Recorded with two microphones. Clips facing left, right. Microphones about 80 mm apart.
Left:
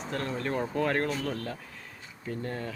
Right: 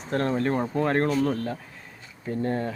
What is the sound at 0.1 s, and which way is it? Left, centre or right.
Speech, right.